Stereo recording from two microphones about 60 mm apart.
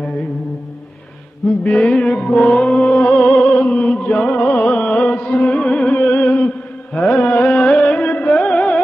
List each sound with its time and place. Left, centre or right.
1.6 s music: centre